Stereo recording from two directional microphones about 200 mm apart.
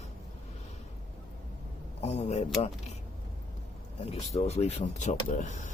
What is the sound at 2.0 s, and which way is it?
Speech, 30° left (ahead or behind).